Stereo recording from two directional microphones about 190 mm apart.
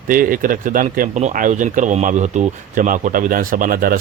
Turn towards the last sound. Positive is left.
turn(degrees=-50)  # may be behind; listen again after turning